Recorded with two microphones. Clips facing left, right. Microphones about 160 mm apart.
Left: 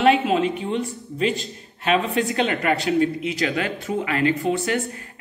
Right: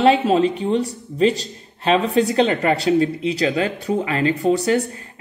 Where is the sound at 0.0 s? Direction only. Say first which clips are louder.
Right 3 dB; 35° right (ahead or behind).